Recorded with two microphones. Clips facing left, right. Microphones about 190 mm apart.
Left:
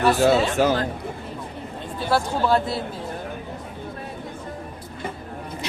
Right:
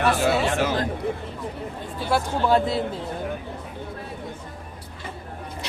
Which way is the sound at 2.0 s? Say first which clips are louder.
Left 1 dB; 15° right (ahead or behind).